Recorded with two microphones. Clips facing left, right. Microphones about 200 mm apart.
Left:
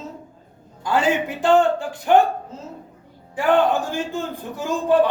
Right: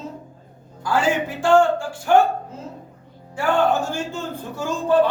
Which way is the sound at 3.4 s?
15° left (ahead or behind).